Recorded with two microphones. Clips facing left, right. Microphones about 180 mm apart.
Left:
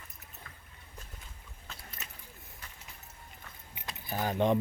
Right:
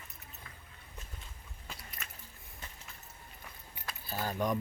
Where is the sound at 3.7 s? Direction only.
20° left (ahead or behind).